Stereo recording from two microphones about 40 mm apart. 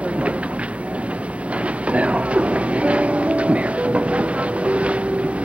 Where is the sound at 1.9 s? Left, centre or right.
Right.